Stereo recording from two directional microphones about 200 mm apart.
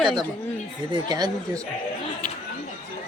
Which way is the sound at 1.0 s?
20° right (ahead or behind).